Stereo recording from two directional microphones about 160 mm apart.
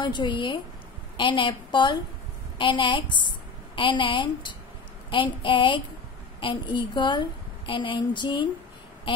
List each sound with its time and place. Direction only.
0.0 s a woman's voice: 30° left (ahead or behind)